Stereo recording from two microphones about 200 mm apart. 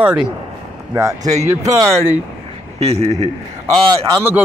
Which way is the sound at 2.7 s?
30° right (ahead or behind).